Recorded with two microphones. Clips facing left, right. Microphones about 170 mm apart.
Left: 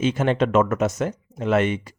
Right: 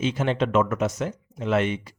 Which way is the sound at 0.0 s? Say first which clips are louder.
Left 3 dB; 50° left (ahead or behind).